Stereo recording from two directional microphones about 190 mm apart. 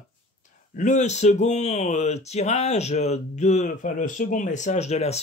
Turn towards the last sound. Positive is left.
turn(degrees=35)  # may be behind; listen again after turning